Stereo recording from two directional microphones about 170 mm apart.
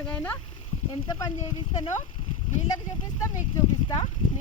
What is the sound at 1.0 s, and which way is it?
Speech, 20° left (ahead or behind).